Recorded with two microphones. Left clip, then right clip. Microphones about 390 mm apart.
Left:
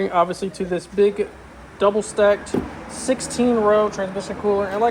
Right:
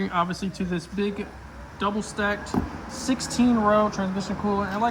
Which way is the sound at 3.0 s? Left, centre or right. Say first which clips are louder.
Left 5 dB; centre.